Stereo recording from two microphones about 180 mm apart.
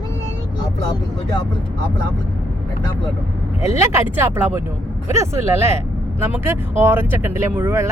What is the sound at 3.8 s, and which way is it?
Speech, 10° right (ahead or behind).